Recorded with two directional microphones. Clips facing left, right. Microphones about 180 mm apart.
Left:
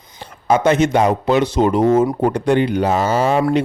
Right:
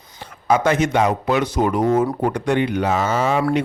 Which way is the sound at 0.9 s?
30° left (ahead or behind).